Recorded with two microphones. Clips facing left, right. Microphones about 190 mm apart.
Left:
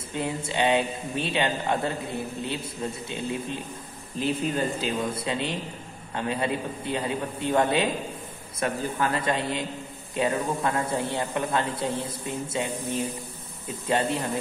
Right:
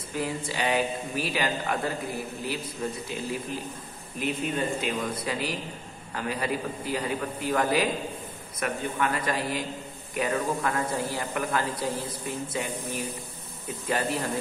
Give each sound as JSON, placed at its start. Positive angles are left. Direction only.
{"t": 0.1, "sound": "a man's voice", "side_deg": 25}